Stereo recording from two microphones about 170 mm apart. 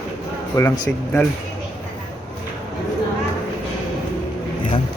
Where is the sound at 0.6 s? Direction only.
25° left (ahead or behind).